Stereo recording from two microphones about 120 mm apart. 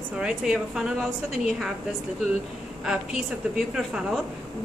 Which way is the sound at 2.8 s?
5° right (ahead or behind).